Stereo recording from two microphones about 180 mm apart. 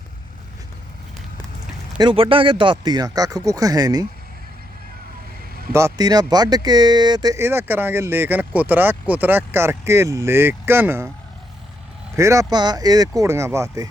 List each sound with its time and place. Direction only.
2.0 s speech: 30° right (ahead or behind)
5.7 s speech: 20° right (ahead or behind)
12.1 s speech: 15° right (ahead or behind)